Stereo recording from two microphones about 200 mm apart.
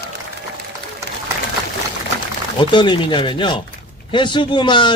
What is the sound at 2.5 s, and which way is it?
Speech, 25° left (ahead or behind).